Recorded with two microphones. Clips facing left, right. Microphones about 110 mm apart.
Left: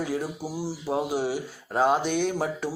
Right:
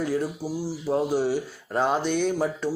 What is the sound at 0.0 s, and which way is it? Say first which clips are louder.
Speech: right 3 dB; 5° left (ahead or behind).